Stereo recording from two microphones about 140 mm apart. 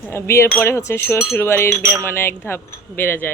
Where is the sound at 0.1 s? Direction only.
20° left (ahead or behind).